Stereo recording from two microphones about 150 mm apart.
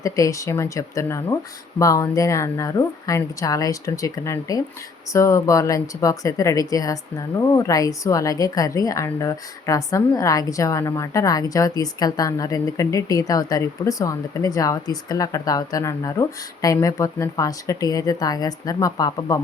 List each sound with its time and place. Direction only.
0.0 s a woman's voice: 20° left (ahead or behind)